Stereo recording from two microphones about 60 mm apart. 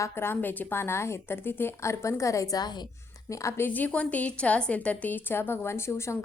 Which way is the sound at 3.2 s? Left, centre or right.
Left.